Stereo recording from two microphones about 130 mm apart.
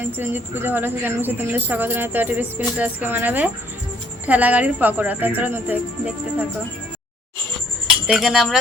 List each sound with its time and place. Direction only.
0.0 s speech: 15° right (ahead or behind)
8.0 s speech: 5° right (ahead or behind)